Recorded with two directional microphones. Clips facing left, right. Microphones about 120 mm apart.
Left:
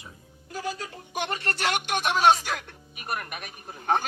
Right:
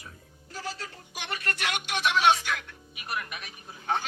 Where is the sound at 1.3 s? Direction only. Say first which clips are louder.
Left 2 dB; 30° left (ahead or behind).